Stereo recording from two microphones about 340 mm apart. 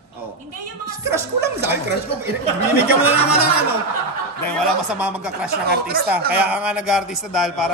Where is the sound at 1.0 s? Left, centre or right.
Centre.